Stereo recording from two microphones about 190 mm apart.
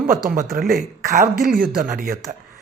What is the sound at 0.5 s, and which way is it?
Speech, 50° right (ahead or behind).